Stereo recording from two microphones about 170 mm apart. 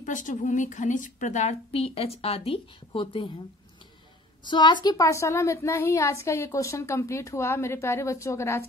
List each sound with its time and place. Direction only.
0.0 s a woman's voice: 50° left (ahead or behind); by 3.3 s 30° left (ahead or behind)
4.5 s a woman's voice: 25° left (ahead or behind)